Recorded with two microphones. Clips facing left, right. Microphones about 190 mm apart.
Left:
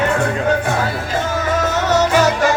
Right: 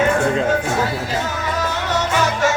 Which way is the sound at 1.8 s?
40° left (ahead or behind).